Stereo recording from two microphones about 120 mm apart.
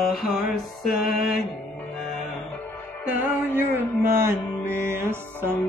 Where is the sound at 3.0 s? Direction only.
15° right (ahead or behind).